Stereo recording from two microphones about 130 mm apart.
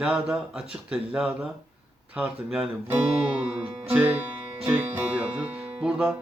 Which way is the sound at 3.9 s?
10° right (ahead or behind).